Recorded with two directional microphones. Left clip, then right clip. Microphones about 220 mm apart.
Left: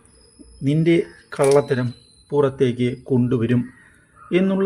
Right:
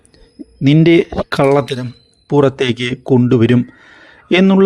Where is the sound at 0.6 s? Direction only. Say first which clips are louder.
Right 8 dB; 35° right (ahead or behind).